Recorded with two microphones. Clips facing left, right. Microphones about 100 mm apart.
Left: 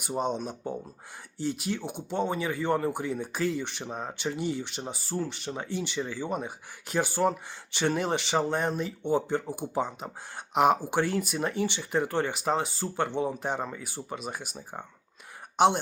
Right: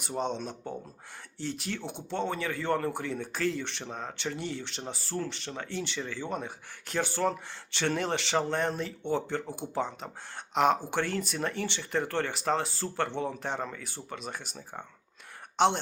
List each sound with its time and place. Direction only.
0.0 s speech: 10° left (ahead or behind)